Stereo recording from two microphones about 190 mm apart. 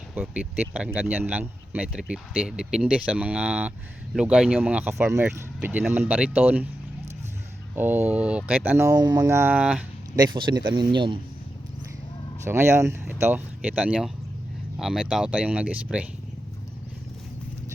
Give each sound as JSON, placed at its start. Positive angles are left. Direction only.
{"t": 0.1, "sound": "speech", "side_deg": -10}
{"t": 7.8, "sound": "speech", "side_deg": -10}
{"t": 10.2, "sound": "speech", "side_deg": -20}
{"t": 12.5, "sound": "speech", "side_deg": -15}